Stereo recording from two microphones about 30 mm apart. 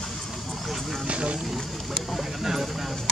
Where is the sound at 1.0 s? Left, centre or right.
Right.